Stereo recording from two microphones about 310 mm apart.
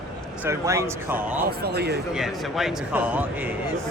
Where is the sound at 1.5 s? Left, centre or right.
Right.